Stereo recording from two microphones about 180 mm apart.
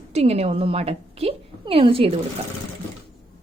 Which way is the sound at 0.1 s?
35° right (ahead or behind).